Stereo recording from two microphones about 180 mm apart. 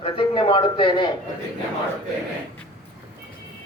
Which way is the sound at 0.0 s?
30° left (ahead or behind).